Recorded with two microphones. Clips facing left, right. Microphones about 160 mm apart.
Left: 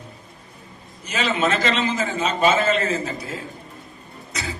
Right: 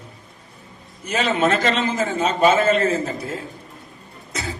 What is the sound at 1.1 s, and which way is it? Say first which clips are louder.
A man's voice: right 3 dB; 50° right (ahead or behind).